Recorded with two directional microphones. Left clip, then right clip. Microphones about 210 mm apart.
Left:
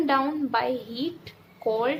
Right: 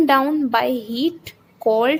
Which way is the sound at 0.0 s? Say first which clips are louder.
Right 8 dB; 40° right (ahead or behind).